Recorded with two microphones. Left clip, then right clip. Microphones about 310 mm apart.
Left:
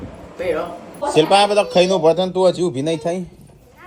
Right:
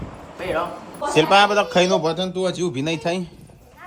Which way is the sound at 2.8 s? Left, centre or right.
Centre.